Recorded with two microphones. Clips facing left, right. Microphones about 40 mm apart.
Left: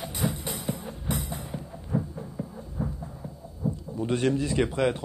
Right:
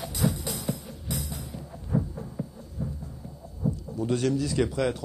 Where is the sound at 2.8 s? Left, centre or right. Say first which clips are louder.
Left 2 dB; left.